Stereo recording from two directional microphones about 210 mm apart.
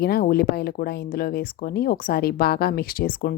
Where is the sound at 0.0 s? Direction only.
45° left (ahead or behind).